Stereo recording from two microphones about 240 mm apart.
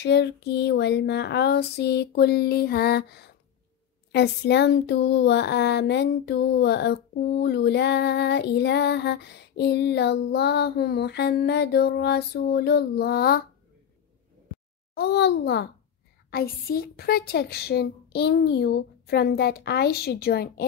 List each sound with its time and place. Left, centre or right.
0.0 s speech: left
15.0 s a woman's voice: left